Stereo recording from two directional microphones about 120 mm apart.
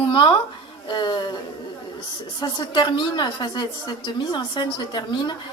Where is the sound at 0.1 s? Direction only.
40° left (ahead or behind).